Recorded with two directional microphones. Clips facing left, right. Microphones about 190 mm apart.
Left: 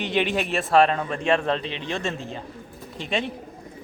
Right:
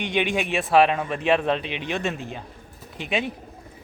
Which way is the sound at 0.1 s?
Centre (ahead or behind).